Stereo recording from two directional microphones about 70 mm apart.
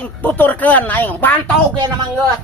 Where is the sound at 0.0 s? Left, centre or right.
Left.